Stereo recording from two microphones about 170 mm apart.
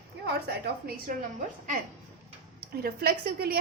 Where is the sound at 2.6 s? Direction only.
65° right (ahead or behind).